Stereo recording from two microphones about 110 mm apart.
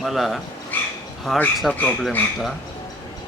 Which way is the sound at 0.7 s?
15° left (ahead or behind).